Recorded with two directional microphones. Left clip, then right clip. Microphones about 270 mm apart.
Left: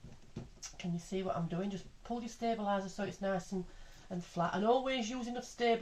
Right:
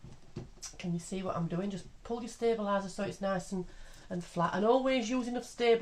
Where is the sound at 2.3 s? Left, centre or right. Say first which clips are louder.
Right 4 dB; right.